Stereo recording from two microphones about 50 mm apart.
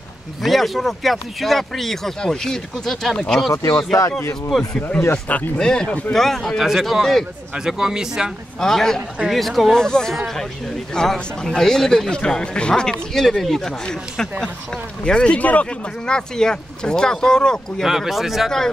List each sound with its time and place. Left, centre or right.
0.4 s speech: centre
3.5 s speech: left
4.5 s speech: centre
5.1 s speech: left
5.6 s speech: centre
6.6 s speech: centre
7.5 s speech: centre
8.5 s speech: centre
9.8 s speech: centre
10.1 s speech: centre
11.0 s speech: centre; by 15.6 s left
16.1 s speech: centre
17.8 s speech: centre